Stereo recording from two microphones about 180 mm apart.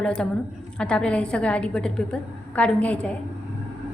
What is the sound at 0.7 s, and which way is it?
A woman's voice, 5° left (ahead or behind).